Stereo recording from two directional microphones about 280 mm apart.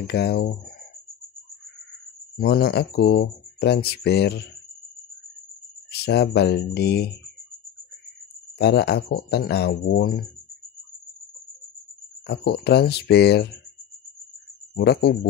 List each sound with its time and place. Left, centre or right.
0.0 s speech: left
2.3 s speech: left
5.9 s speech: left
8.5 s speech: left
12.3 s speech: left
14.8 s speech: left